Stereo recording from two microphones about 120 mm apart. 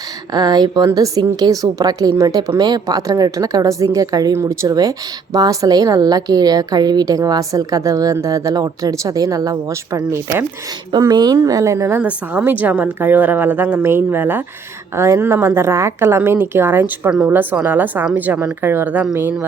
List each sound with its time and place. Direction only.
0.3 s a woman's voice: 35° right (ahead or behind)
10.9 s a woman's voice: 35° right (ahead or behind); by 19.5 s 15° right (ahead or behind)